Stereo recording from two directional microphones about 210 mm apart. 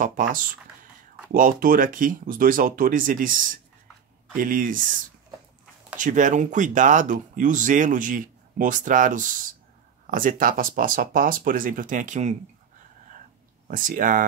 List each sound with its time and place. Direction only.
0.0 s speech: 40° right (ahead or behind)
5.9 s speech: 35° right (ahead or behind)
13.7 s speech: 40° right (ahead or behind)